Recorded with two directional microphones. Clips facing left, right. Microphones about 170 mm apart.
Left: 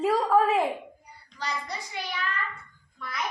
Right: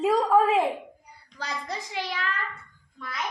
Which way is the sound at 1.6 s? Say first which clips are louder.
Right 3 dB; 90° right.